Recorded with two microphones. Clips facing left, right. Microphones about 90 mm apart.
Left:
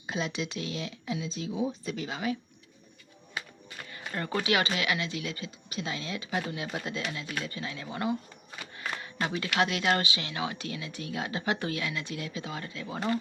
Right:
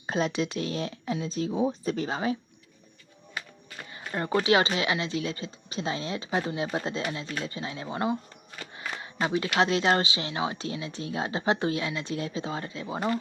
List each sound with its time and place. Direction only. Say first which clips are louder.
0.1 s speech: right 5 dB; 40° right (ahead or behind)
3.8 s speech: right 4 dB; 25° right (ahead or behind)